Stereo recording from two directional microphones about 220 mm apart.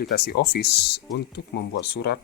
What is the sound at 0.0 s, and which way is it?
Speech, 45° left (ahead or behind).